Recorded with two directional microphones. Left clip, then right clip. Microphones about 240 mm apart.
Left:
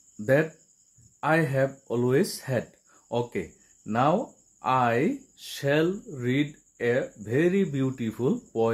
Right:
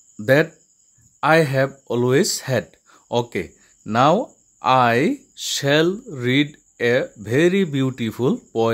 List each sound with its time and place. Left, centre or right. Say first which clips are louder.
0.2 s speech: right 7 dB; right